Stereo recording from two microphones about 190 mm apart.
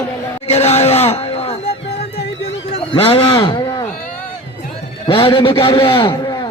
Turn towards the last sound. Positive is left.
turn(degrees=25)  # may be behind; listen again after turning